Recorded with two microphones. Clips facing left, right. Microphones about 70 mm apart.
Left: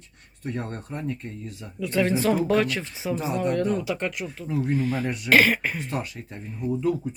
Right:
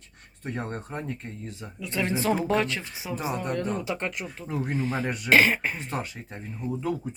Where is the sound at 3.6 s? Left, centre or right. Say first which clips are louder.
Left 4 dB; right.